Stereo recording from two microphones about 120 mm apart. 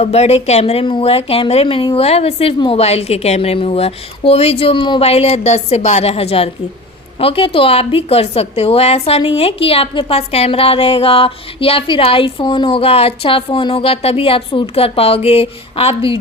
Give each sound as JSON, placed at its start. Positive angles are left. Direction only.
{"t": 0.0, "sound": "a woman's voice", "side_deg": 60}